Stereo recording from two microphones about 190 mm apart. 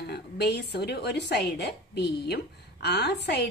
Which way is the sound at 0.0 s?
60° left (ahead or behind).